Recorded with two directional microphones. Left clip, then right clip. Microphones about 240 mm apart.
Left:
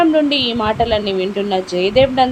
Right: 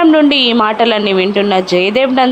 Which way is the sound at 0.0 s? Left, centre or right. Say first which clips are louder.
Right 5 dB; centre.